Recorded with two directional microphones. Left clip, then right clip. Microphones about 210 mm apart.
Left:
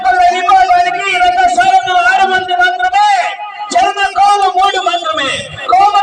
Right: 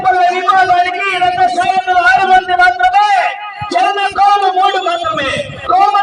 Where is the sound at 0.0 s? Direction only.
45° left (ahead or behind).